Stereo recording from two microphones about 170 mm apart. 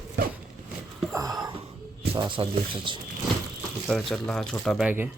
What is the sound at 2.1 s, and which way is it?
Speech, 30° right (ahead or behind).